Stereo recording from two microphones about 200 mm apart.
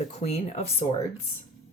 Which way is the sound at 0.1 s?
35° left (ahead or behind).